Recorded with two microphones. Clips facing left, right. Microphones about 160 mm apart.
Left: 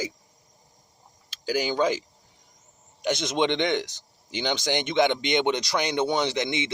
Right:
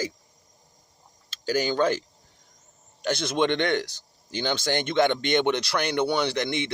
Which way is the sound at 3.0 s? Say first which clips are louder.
Even; 15° left (ahead or behind).